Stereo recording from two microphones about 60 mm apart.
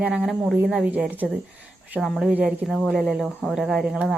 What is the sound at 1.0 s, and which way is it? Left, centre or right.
Speech, right.